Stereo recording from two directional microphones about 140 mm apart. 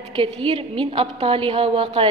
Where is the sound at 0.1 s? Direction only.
40° right (ahead or behind).